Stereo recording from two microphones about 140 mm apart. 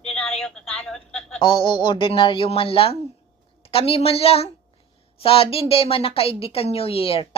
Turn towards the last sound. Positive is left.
turn(degrees=45)  # may be behind; listen again after turning